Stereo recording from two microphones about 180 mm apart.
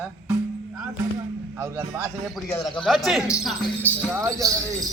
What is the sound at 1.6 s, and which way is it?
Speech, 15° right (ahead or behind).